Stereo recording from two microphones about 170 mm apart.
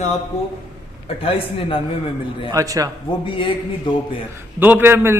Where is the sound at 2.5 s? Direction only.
20° right (ahead or behind).